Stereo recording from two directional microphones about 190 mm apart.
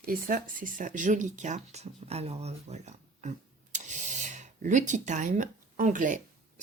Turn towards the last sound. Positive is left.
turn(degrees=-45)  # may be behind; listen again after turning